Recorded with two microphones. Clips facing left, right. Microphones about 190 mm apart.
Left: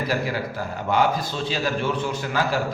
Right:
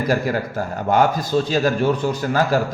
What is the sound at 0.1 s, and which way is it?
Speech, 45° right (ahead or behind).